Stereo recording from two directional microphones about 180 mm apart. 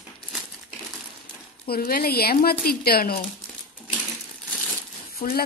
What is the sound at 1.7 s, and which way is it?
Speech, 55° left (ahead or behind).